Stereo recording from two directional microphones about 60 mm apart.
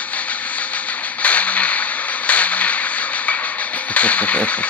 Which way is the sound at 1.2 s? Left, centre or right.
Left.